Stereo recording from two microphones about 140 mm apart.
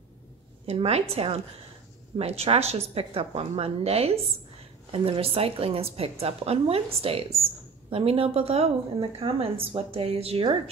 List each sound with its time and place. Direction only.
0.7 s a woman's voice: 45° right (ahead or behind)